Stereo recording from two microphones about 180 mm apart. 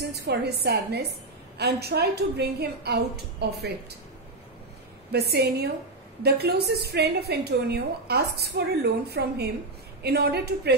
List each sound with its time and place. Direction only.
0.1 s a woman's voice: 70° right (ahead or behind)
5.1 s a woman's voice: 65° right (ahead or behind)